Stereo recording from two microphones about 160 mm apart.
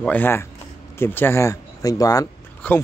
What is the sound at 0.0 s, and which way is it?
Speech, 10° left (ahead or behind).